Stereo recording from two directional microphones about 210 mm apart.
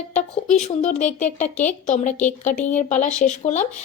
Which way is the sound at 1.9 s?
35° left (ahead or behind).